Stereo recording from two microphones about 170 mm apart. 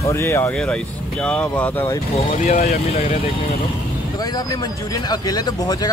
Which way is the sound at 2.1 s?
45° left (ahead or behind).